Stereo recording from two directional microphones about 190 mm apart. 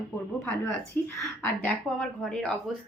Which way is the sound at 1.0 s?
10° left (ahead or behind).